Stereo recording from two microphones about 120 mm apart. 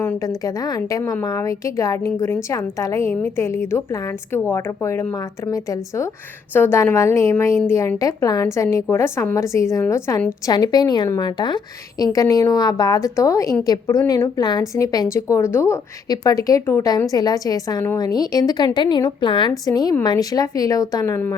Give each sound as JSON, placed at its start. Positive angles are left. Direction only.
{"t": 0.2, "sound": "a woman's voice", "side_deg": 30}